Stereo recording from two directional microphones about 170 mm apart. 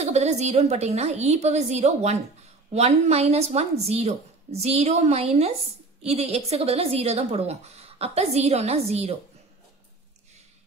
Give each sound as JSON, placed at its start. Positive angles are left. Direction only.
{"t": 0.0, "sound": "a woman's voice", "side_deg": -40}